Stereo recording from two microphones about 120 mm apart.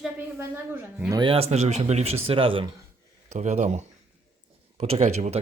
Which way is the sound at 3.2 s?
70° right (ahead or behind).